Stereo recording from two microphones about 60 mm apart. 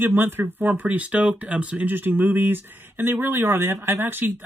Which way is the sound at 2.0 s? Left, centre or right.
Right.